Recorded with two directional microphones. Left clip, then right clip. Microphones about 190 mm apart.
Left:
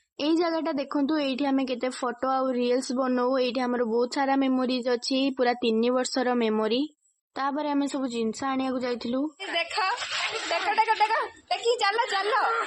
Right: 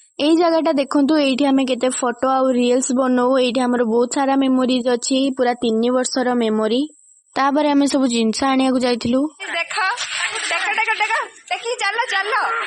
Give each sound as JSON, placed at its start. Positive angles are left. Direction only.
{"t": 0.2, "sound": "a woman's voice", "side_deg": -50}
{"t": 7.3, "sound": "a woman's voice", "side_deg": -55}
{"t": 9.6, "sound": "speech", "side_deg": -20}
{"t": 10.5, "sound": "a sound", "side_deg": -30}